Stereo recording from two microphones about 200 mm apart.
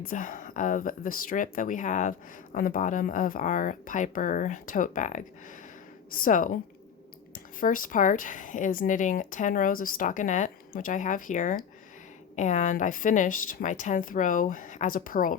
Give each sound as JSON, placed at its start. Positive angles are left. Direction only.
{"t": 0.0, "sound": "a woman's voice", "side_deg": 40}
{"t": 7.6, "sound": "speech", "side_deg": 40}